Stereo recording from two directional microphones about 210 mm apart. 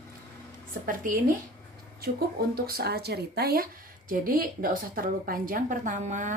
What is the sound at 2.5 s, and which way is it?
A woman's voice, 45° right (ahead or behind).